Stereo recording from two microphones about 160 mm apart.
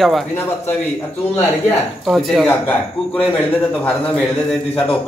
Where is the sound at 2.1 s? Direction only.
Centre (ahead or behind).